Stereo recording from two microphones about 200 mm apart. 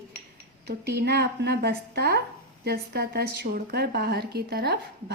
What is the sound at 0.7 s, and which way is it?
A woman's voice, 55° right (ahead or behind).